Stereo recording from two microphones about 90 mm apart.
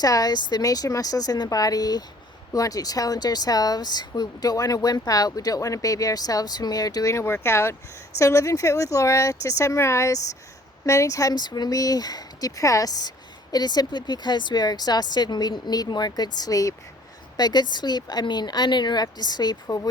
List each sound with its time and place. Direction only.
0.0 s speech: 45° left (ahead or behind)